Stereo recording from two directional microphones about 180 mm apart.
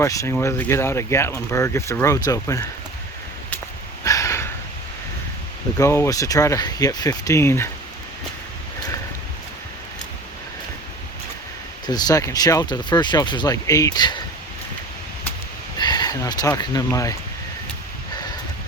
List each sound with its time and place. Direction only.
0.0 s speech: 15° left (ahead or behind)
4.0 s a sound: 15° left (ahead or behind)
5.7 s speech: 15° left (ahead or behind)
11.9 s speech: 20° left (ahead or behind)
15.8 s speech: 20° left (ahead or behind)